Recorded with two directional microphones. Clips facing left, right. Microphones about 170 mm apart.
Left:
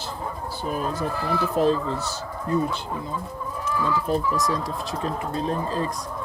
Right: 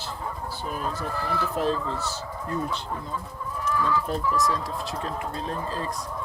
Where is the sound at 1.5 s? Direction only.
15° left (ahead or behind).